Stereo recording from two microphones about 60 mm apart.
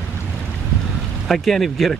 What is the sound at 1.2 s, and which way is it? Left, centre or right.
Speech, centre.